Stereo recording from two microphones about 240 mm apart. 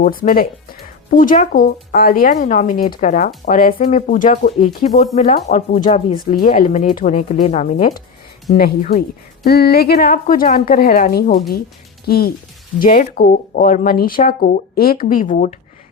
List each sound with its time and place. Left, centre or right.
0.0 s speech: left